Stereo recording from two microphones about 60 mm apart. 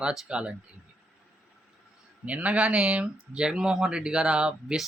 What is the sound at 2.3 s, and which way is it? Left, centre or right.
Speech, right.